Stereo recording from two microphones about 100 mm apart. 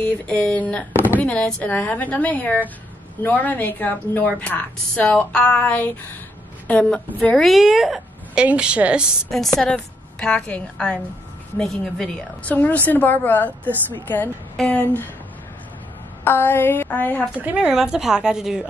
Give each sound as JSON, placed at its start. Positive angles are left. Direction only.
{"t": 0.0, "sound": "a woman's voice", "side_deg": 15}
{"t": 7.4, "sound": "a woman's voice", "side_deg": 0}
{"t": 9.3, "sound": "a woman's voice", "side_deg": 5}
{"t": 12.4, "sound": "a woman's voice", "side_deg": 15}
{"t": 16.3, "sound": "a woman's voice", "side_deg": 20}
{"t": 17.4, "sound": "a woman's voice", "side_deg": -15}